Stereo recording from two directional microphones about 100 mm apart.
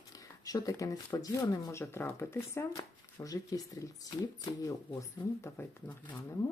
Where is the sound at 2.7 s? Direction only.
35° left (ahead or behind).